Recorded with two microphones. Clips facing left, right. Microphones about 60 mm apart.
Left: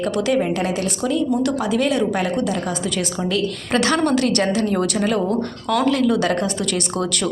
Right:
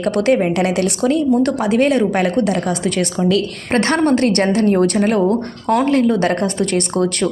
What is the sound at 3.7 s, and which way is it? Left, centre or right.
A woman's voice, right.